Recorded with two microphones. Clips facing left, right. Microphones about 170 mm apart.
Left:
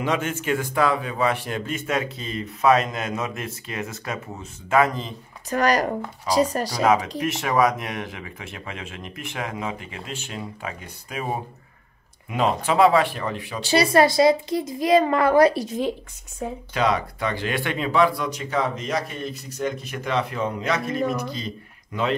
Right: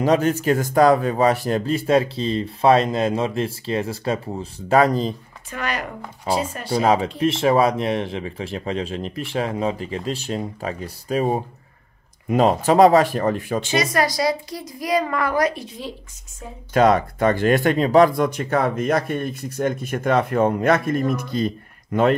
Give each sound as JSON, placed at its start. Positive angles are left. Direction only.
{"t": 0.0, "sound": "speech", "side_deg": -40}
{"t": 5.5, "sound": "speech", "side_deg": 40}
{"t": 6.7, "sound": "speech", "side_deg": -35}
{"t": 13.6, "sound": "a woman's voice", "side_deg": 35}
{"t": 16.7, "sound": "speech", "side_deg": -50}